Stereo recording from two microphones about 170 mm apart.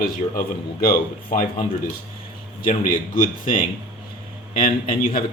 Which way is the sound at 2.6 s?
55° left (ahead or behind).